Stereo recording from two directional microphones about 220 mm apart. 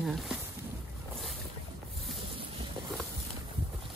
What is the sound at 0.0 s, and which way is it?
Speech, centre (ahead or behind).